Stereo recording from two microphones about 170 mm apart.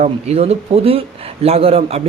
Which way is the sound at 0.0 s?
40° right (ahead or behind).